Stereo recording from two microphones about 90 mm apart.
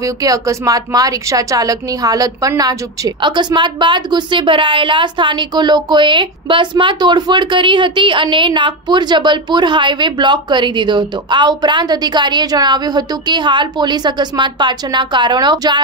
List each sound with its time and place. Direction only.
0.0 s a woman's voice: 40° right (ahead or behind)
3.2 s a woman's voice: 55° right (ahead or behind)